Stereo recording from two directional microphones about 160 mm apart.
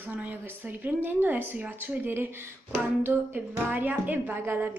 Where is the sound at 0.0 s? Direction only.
10° right (ahead or behind).